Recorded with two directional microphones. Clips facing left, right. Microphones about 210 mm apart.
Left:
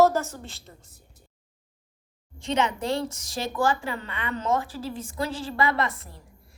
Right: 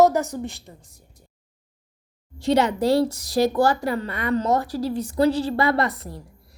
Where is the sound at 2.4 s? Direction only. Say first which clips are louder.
Right 7 dB; 35° right (ahead or behind).